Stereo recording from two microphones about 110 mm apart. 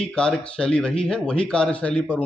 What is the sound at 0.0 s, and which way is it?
Speech, 10° left (ahead or behind).